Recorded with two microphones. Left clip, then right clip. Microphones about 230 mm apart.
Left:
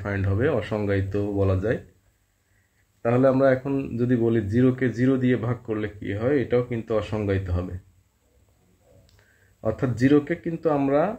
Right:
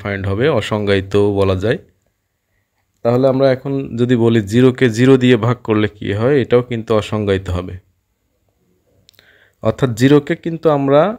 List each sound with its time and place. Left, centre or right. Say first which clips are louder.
0.0 s speech: right 9 dB; right
3.0 s speech: right 7 dB; right
3.6 s speech: right 6 dB; right
3.9 s speech: right 10 dB; right
9.6 s speech: right 9 dB; right